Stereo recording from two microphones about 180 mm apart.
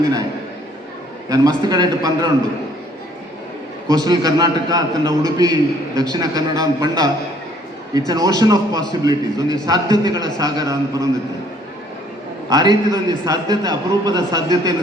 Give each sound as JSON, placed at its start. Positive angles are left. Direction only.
{"t": 0.0, "sound": "a man's voice", "side_deg": -20}
{"t": 1.3, "sound": "a man's voice", "side_deg": -20}
{"t": 3.8, "sound": "a man's voice", "side_deg": -20}
{"t": 12.5, "sound": "a man's voice", "side_deg": -20}